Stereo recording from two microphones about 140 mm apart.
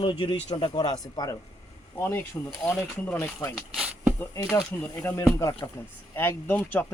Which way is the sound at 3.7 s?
10° right (ahead or behind).